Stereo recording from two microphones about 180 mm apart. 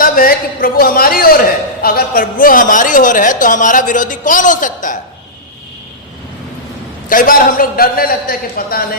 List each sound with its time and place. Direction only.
0.0 s a man's voice: 50° left (ahead or behind)
7.1 s a woman's voice: 50° left (ahead or behind)